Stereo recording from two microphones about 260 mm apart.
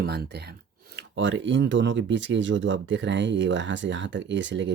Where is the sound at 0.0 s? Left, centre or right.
Right.